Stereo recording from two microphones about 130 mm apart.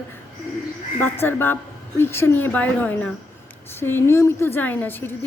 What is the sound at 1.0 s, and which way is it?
A woman's voice, 15° left (ahead or behind).